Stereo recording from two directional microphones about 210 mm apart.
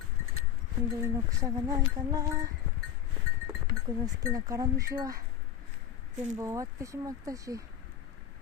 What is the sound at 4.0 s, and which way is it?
Speech, 15° right (ahead or behind).